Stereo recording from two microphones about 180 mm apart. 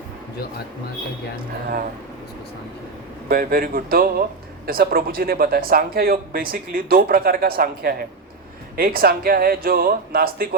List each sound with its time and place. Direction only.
3.2 s a man's voice: 55° right (ahead or behind)